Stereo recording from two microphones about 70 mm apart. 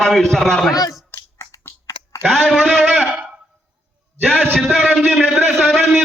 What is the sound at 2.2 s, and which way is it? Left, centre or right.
Speech, centre.